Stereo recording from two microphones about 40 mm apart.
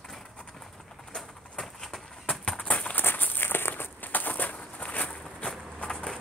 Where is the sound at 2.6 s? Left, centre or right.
Left.